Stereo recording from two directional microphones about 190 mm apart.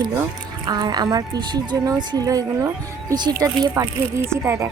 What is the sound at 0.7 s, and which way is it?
A woman's voice, 20° right (ahead or behind).